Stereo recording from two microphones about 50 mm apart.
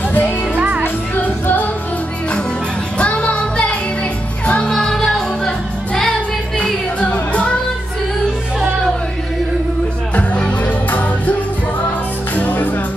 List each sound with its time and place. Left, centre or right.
0.6 s music: right
1.1 s music: left
3.0 s music: left
4.6 s music: centre
7.0 s music: left
10.1 s music: left
12.4 s music: left